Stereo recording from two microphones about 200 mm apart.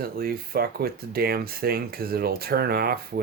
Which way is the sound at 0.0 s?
50° right (ahead or behind).